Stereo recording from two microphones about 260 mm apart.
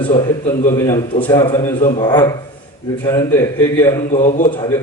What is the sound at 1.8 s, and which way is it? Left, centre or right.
Speech, left.